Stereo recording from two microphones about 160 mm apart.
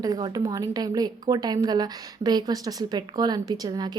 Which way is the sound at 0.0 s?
25° right (ahead or behind).